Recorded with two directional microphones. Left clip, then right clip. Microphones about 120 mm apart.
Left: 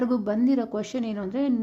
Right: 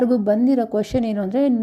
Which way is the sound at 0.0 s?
35° right (ahead or behind).